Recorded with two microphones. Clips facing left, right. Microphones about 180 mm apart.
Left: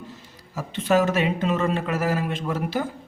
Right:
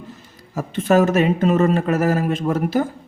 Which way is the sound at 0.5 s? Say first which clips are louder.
Right 4 dB; 50° right (ahead or behind).